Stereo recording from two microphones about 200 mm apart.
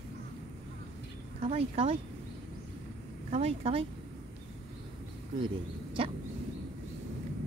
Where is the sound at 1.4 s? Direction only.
30° right (ahead or behind).